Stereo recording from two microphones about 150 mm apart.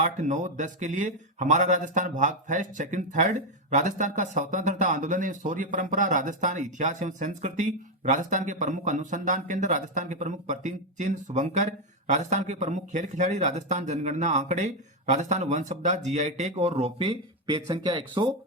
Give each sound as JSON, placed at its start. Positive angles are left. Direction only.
{"t": 0.0, "sound": "speech", "side_deg": -55}